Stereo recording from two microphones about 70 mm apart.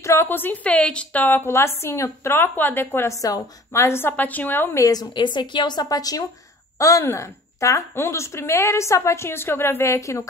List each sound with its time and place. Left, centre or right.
0.0 s a woman's voice: left
3.1 s a woman's voice: left
3.8 s a woman's voice: left
4.2 s a woman's voice: left
4.9 s a woman's voice: left
6.8 s a woman's voice: left